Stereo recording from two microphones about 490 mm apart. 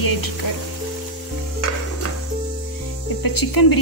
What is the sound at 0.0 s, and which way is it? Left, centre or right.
Sizzle, left.